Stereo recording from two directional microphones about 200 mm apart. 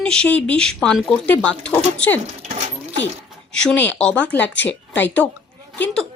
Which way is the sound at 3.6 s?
5° left (ahead or behind).